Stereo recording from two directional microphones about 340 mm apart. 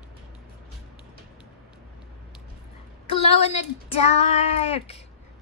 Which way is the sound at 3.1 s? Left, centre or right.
Centre.